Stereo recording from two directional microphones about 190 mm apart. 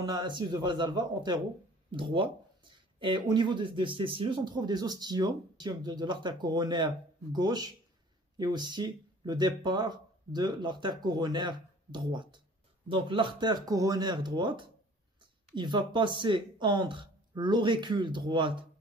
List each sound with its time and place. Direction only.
0.0 s speech: 25° right (ahead or behind)